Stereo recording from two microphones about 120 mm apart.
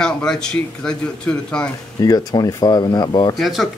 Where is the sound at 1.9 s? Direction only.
30° left (ahead or behind).